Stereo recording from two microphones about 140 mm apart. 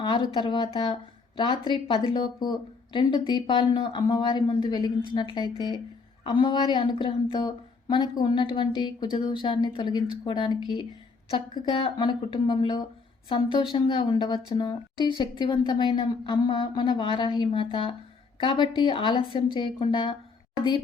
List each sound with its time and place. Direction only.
0.3 s a woman's voice: 35° left (ahead or behind)